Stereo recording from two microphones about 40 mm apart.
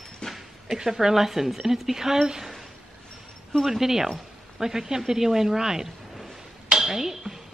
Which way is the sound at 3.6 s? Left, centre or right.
Centre.